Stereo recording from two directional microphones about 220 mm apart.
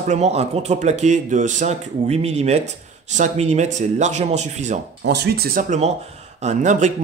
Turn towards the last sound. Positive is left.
turn(degrees=-35)  # may be behind; listen again after turning